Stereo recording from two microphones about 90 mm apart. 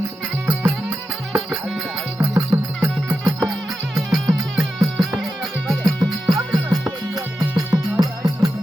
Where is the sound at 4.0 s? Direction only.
5° right (ahead or behind).